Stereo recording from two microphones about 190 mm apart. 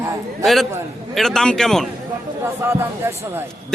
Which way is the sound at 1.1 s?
Centre (ahead or behind).